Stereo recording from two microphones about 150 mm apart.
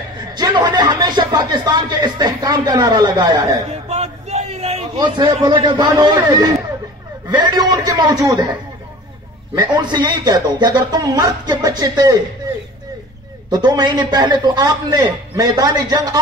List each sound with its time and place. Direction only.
0.3 s speech: 30° right (ahead or behind)
3.9 s a sound: 45° right (ahead or behind)
4.9 s a man's voice: 30° right (ahead or behind)
9.6 s a man's voice: 30° right (ahead or behind)
13.5 s a man's voice: 30° right (ahead or behind)